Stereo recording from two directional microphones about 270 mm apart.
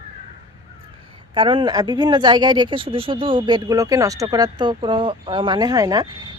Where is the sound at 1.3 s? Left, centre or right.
Centre.